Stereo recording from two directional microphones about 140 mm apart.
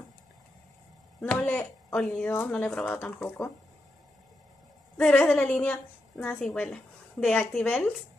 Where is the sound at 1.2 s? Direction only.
10° left (ahead or behind).